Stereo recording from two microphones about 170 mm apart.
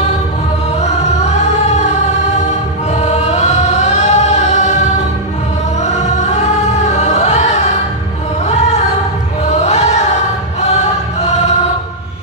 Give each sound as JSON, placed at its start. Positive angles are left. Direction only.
{"t": 2.9, "sound": "choir", "side_deg": 40}
{"t": 5.9, "sound": "music", "side_deg": 40}
{"t": 9.5, "sound": "chant", "side_deg": 40}